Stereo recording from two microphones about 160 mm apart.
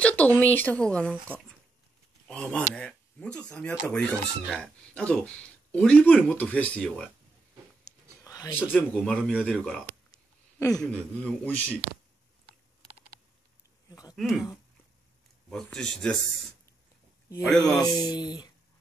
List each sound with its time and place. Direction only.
0.0 s speech: 10° left (ahead or behind)
2.2 s speech: 5° left (ahead or behind)
7.8 s a sound: 20° left (ahead or behind)
8.7 s speech: 5° left (ahead or behind)
10.1 s a sound: 20° left (ahead or behind)
10.8 s speech: 5° left (ahead or behind)
13.8 s a sound: 25° left (ahead or behind)
14.1 s speech: centre (ahead or behind)
15.5 s speech: 5° left (ahead or behind)
17.6 s speech: 25° left (ahead or behind)